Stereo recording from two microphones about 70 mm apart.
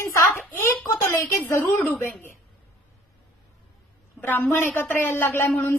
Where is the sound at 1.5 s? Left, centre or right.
Left.